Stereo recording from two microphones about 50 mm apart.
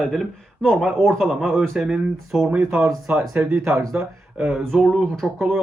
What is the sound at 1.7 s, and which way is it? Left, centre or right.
Speech, centre.